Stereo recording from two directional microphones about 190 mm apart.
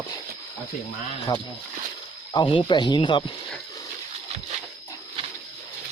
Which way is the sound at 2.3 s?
25° left (ahead or behind).